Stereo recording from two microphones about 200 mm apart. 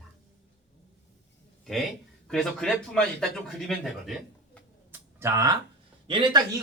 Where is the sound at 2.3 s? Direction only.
5° left (ahead or behind).